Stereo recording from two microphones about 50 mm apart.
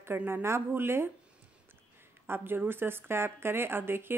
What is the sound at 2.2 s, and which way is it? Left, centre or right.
Speech, right.